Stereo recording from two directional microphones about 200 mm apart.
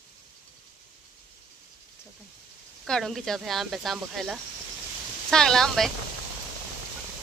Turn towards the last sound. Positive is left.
turn(degrees=0)  # may be behind; listen again after turning